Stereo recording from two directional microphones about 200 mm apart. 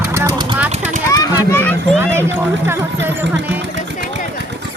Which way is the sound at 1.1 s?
15° left (ahead or behind).